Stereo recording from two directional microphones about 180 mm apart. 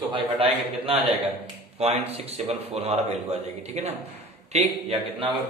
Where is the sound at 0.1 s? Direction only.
30° right (ahead or behind).